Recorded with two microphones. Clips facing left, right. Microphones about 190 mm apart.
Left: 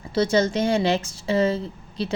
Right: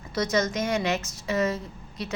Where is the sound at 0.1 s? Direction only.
30° left (ahead or behind).